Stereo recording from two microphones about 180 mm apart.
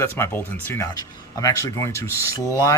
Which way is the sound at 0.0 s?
15° left (ahead or behind).